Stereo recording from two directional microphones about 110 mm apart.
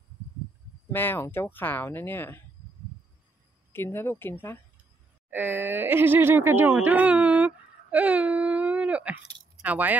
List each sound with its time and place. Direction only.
0.8 s speech: 20° left (ahead or behind)
3.7 s speech: 20° left (ahead or behind)
5.3 s speech: 15° right (ahead or behind)